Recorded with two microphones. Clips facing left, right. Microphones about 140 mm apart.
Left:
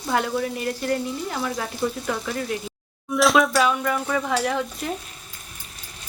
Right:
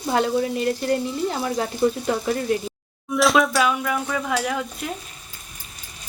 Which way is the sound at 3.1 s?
Centre (ahead or behind).